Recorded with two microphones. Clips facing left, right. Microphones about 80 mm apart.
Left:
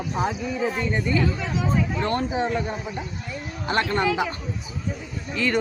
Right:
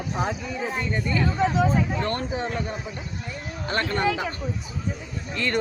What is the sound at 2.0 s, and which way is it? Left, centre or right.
Speech, centre.